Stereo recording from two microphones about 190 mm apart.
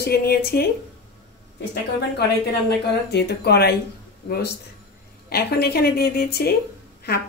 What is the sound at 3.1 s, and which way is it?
Speech, 60° left (ahead or behind).